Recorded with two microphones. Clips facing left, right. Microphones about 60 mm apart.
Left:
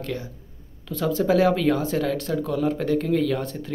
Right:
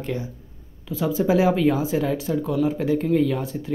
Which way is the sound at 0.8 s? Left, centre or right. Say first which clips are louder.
Even; centre.